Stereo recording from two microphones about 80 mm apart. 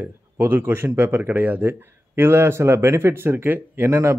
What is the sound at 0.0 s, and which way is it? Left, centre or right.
Speech, right.